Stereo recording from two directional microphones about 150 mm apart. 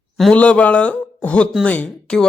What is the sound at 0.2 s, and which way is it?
A man's voice, 5° left (ahead or behind).